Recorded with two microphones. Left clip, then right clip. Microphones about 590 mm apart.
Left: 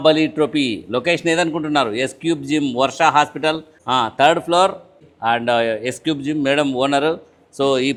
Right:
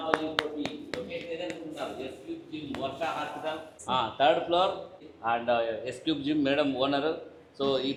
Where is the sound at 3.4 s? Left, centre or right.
Left.